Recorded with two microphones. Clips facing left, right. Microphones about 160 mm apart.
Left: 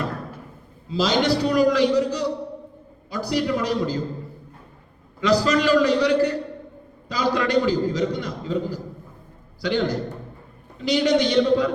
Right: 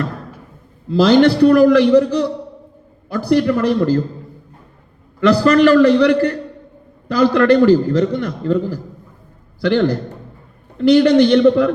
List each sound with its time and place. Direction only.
0.9 s a man's voice: 60° right (ahead or behind)
5.2 s a man's voice: 60° right (ahead or behind)